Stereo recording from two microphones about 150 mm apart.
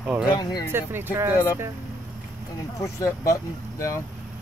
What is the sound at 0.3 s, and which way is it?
Speech, 25° left (ahead or behind).